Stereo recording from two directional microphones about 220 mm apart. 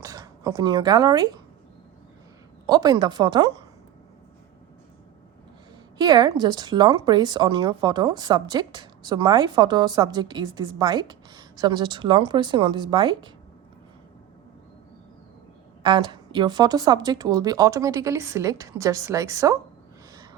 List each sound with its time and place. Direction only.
0.0 s speech: 15° right (ahead or behind)
2.6 s a woman's voice: 20° right (ahead or behind)
6.0 s a woman's voice: 20° right (ahead or behind)
15.8 s speech: 20° right (ahead or behind)